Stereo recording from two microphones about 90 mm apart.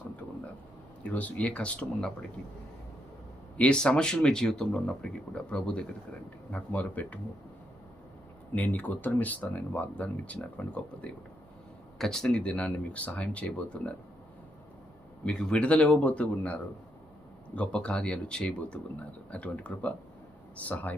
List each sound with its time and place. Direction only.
1.0 s speech: 15° left (ahead or behind)
3.6 s speech: 10° left (ahead or behind)
8.5 s speech: 15° left (ahead or behind)
15.2 s speech: 10° left (ahead or behind)